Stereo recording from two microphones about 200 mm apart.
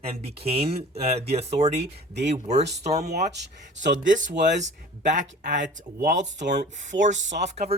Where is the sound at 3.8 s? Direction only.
40° right (ahead or behind).